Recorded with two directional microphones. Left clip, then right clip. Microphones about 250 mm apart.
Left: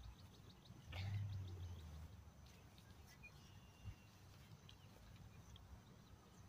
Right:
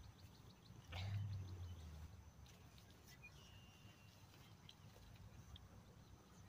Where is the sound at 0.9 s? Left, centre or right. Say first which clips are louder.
Right 1 dB; right.